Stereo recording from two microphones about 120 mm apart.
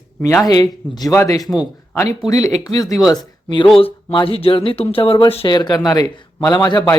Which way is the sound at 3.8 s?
50° left (ahead or behind).